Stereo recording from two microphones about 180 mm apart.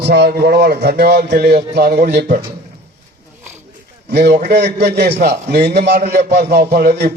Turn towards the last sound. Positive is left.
turn(degrees=-60)  # may be behind; listen again after turning